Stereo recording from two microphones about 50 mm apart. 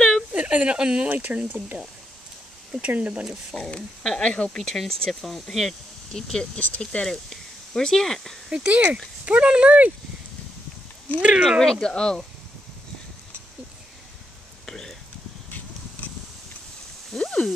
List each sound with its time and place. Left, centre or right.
0.3 s a sound: right
0.7 s speech: centre
1.0 s speech: right
2.8 s speech: right
3.5 s speech: centre
4.6 s speech: centre
6.1 s speech: centre
8.5 s speech: right
11.1 s speech: right
11.6 s speech: centre
14.7 s whispering: centre
16.0 s a sound: left
17.2 s a sound: centre